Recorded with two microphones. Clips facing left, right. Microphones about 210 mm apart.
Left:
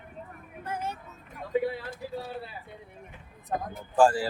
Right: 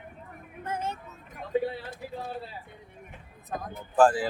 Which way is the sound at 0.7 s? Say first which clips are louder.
Right 1 dB; 25° right (ahead or behind).